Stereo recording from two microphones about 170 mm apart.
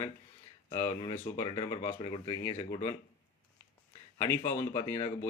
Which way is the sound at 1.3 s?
25° left (ahead or behind).